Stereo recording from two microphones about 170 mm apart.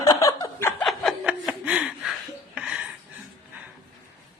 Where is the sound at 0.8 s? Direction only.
Centre (ahead or behind).